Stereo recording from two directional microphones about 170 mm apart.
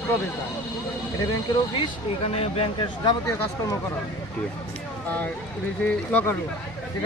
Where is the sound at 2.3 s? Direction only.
35° left (ahead or behind).